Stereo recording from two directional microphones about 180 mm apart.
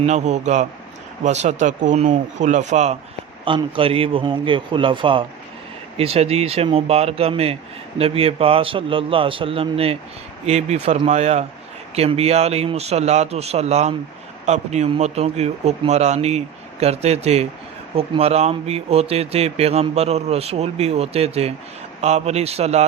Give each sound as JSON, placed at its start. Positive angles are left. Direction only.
{"t": 0.0, "sound": "speech", "side_deg": -40}
{"t": 3.4, "sound": "a man's voice", "side_deg": -30}